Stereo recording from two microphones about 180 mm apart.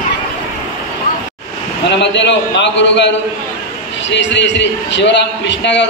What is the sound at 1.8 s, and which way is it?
A man's voice, 80° left.